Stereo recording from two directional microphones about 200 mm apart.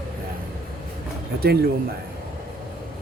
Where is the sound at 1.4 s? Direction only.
50° right (ahead or behind).